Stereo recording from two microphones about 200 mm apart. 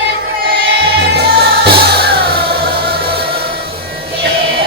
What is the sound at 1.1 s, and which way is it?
Music, 55° right (ahead or behind).